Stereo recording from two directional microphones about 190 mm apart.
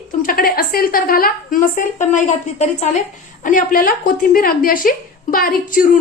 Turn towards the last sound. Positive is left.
turn(degrees=50)  # may be behind; listen again after turning